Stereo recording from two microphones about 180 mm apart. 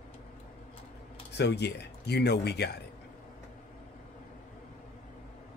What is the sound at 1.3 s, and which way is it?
Speech, 70° left (ahead or behind).